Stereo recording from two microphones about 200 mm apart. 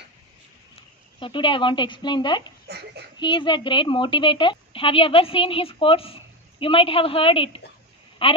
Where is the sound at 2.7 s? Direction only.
55° right (ahead or behind).